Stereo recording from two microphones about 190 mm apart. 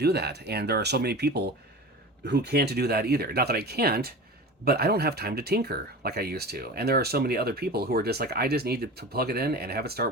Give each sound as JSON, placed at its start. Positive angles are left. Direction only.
{"t": 0.0, "sound": "speech", "side_deg": -60}